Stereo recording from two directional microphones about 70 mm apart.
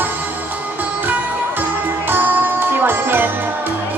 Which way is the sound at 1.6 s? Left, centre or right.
Right.